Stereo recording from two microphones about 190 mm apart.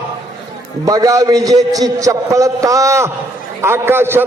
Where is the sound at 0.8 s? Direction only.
20° right (ahead or behind).